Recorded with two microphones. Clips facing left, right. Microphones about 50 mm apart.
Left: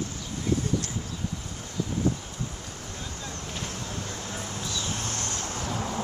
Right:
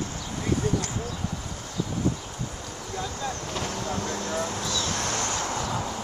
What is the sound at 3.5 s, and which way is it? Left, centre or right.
Vehicle, right.